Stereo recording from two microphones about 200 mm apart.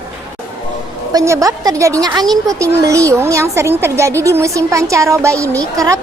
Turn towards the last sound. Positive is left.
turn(degrees=-15)  # may be behind; listen again after turning